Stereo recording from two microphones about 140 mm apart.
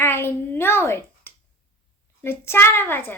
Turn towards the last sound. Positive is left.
turn(degrees=15)  # may be behind; listen again after turning